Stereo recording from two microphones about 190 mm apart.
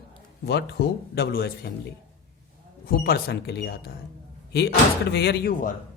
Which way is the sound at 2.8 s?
50° left (ahead or behind).